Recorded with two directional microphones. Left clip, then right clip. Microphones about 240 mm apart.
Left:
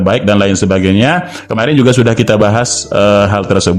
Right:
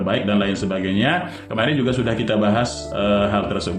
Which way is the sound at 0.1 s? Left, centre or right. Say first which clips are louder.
Left 10 dB; left.